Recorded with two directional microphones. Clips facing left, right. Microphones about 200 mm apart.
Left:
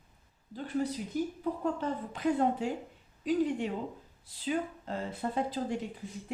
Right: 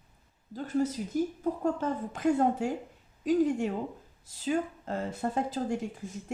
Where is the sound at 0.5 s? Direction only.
45° right (ahead or behind).